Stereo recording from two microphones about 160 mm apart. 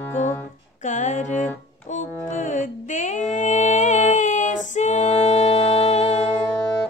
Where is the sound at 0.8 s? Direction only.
50° left (ahead or behind).